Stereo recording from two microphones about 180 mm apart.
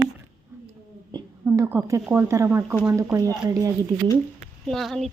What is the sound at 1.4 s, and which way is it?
A woman's voice, 15° right (ahead or behind).